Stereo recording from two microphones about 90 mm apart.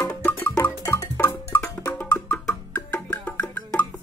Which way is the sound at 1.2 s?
25° left (ahead or behind).